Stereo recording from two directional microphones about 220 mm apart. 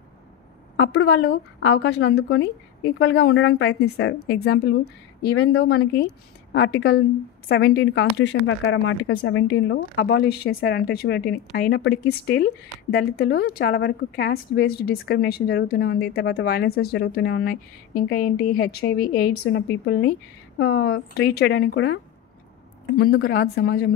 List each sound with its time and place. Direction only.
0.7 s a woman's voice: 50° left (ahead or behind)
5.6 s a woman's voice: 50° left (ahead or behind)
7.4 s a woman's voice: 45° left (ahead or behind)
22.9 s a woman's voice: 45° left (ahead or behind)